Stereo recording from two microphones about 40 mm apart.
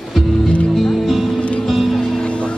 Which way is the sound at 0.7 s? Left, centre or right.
Centre.